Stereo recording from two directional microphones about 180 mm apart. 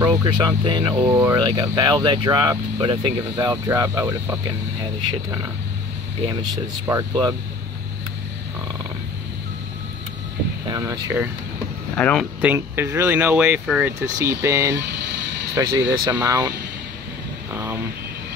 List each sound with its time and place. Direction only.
0.2 s speech: 20° right (ahead or behind)
6.5 s speech: 20° right (ahead or behind)
10.7 s speech: 20° right (ahead or behind)
12.0 s speech: 5° left (ahead or behind)
12.4 s speech: 10° right (ahead or behind)
14.0 s speech: 15° right (ahead or behind)
17.5 s vehicle: 15° right (ahead or behind)